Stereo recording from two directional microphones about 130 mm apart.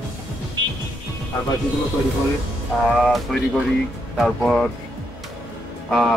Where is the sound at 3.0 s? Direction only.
5° left (ahead or behind).